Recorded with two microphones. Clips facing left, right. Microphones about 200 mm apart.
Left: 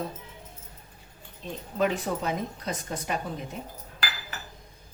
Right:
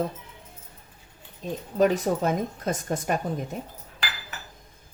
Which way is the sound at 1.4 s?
45° right (ahead or behind).